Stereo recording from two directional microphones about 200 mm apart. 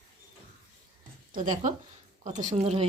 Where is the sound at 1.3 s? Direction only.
40° right (ahead or behind).